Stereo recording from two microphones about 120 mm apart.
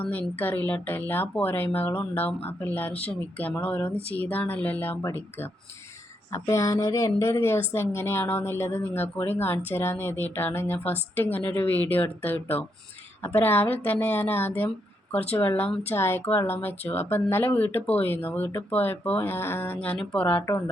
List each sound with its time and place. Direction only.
0.0 s a woman's voice: 15° left (ahead or behind)